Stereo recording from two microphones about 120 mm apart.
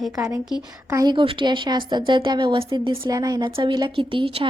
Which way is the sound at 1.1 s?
45° right (ahead or behind).